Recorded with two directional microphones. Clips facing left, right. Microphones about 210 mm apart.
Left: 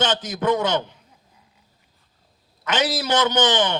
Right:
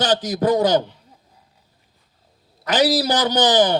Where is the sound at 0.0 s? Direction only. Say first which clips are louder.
Right 3 dB; 35° right (ahead or behind).